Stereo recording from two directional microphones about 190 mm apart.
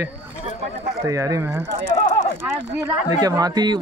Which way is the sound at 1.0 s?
15° right (ahead or behind).